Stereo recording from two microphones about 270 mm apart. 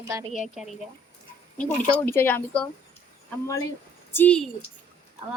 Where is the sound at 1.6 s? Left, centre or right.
Centre.